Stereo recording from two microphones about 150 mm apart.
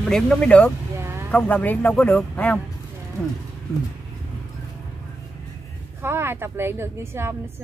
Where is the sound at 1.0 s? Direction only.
15° right (ahead or behind).